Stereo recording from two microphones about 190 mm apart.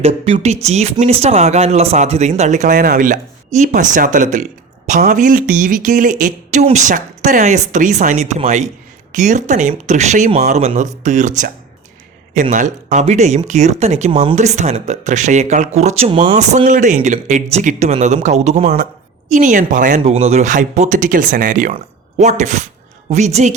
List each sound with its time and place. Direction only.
0.0 s speech: 30° right (ahead or behind)
2.7 s speech: 50° right (ahead or behind)
14.1 s speech: 25° right (ahead or behind)
14.3 s a woman's voice: 40° right (ahead or behind)